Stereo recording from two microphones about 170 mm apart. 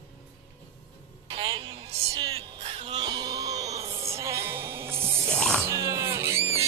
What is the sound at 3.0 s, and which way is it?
Sheep, 25° right (ahead or behind).